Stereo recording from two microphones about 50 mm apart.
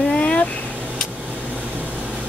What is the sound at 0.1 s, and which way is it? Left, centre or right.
Vehicle, left.